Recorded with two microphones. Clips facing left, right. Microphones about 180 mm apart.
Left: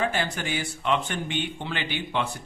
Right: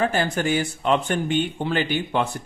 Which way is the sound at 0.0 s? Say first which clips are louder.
Right 5 dB; 45° right (ahead or behind).